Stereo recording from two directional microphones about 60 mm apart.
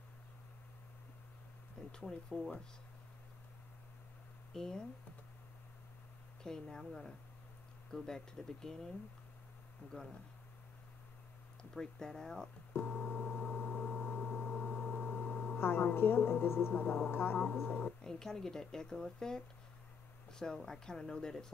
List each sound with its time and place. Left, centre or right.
1.9 s speech: centre
4.6 s speech: centre
6.4 s speech: centre
11.7 s speech: centre
12.8 s busy signal: left
13.7 s a sound: left
15.5 s a woman's voice: left
17.6 s speech: left
18.0 s speech: centre